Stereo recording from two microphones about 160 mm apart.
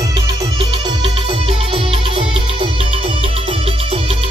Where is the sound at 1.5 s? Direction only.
35° right (ahead or behind).